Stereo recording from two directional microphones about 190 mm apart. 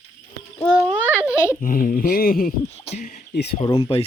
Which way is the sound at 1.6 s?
45° left (ahead or behind).